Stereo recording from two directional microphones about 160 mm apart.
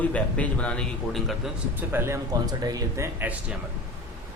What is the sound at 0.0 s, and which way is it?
A man's voice, 10° left (ahead or behind).